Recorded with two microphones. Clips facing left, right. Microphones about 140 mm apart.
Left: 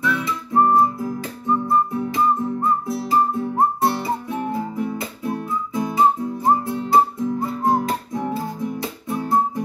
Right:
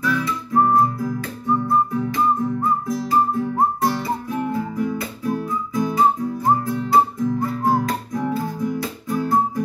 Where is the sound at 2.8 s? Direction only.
25° left (ahead or behind).